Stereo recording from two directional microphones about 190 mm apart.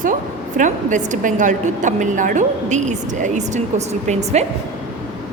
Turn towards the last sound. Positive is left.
turn(degrees=-35)  # may be behind; listen again after turning